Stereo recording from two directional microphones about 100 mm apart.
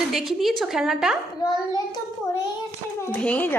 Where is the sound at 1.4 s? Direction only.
40° left (ahead or behind).